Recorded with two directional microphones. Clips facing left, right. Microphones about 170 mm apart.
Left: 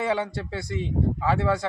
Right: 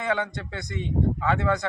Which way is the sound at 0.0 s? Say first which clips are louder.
Left 2 dB; 30° left (ahead or behind).